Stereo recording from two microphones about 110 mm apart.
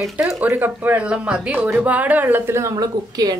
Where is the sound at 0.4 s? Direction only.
15° right (ahead or behind).